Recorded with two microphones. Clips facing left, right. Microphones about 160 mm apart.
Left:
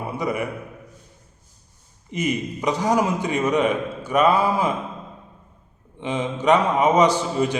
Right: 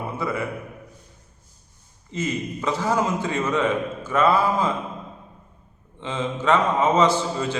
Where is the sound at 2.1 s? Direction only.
15° left (ahead or behind).